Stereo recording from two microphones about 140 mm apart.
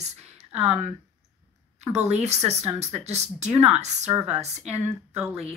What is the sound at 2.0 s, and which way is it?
Speech, 50° right (ahead or behind).